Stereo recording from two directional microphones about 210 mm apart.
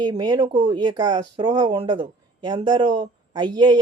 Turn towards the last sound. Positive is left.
turn(degrees=-20)  # may be behind; listen again after turning